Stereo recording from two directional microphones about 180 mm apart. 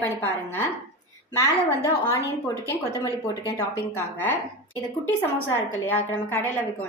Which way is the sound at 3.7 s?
15° left (ahead or behind).